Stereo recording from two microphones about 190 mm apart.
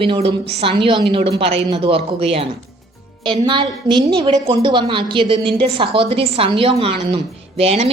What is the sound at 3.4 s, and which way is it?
A woman's voice, 25° right (ahead or behind).